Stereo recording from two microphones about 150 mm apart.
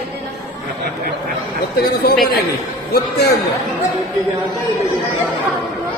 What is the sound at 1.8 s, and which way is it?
Speech, 90° left.